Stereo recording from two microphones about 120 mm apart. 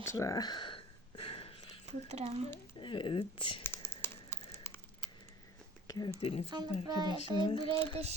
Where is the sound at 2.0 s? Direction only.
65° right (ahead or behind).